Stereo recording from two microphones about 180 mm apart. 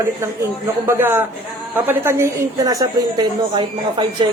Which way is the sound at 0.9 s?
10° right (ahead or behind).